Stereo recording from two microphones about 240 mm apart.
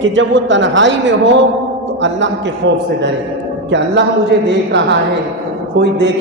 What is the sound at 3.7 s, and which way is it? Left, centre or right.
A man's voice, right.